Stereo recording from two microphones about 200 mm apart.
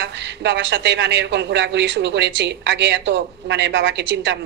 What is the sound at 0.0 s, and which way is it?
A woman's voice, 60° right (ahead or behind).